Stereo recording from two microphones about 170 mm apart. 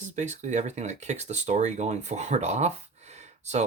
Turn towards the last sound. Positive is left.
turn(degrees=-40)  # may be behind; listen again after turning